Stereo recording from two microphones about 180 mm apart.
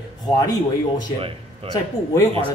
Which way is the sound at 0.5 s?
20° left (ahead or behind).